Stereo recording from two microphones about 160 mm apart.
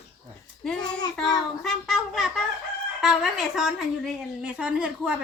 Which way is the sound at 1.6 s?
Centre (ahead or behind).